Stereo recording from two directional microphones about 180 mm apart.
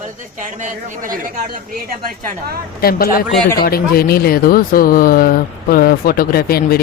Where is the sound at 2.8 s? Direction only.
55° left (ahead or behind).